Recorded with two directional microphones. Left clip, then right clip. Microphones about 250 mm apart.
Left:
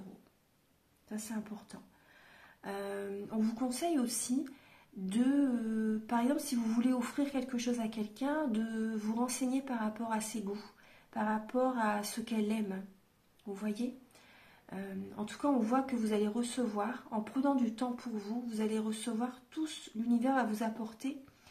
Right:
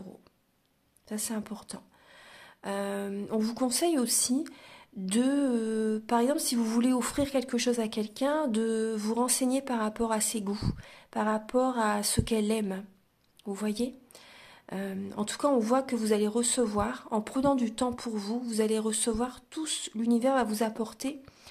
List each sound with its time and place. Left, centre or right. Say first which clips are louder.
1.0 s a woman's voice: right 7 dB; right